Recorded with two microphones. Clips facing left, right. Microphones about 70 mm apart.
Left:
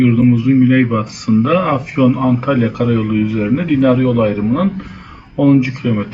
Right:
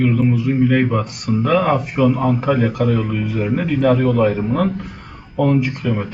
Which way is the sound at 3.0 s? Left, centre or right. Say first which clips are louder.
Left 6 dB; centre.